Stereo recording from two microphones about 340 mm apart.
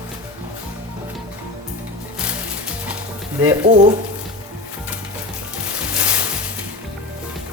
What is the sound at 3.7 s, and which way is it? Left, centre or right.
Speech, right.